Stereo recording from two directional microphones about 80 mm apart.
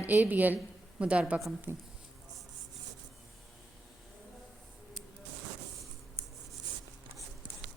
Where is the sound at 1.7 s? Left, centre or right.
Right.